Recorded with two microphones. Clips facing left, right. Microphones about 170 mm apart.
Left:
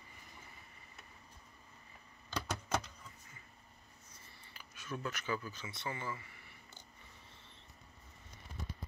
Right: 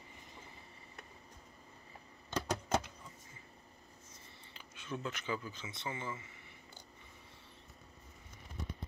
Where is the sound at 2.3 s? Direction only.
20° right (ahead or behind).